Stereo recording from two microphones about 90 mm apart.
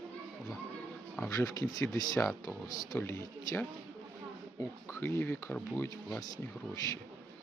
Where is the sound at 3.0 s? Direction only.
30° left (ahead or behind).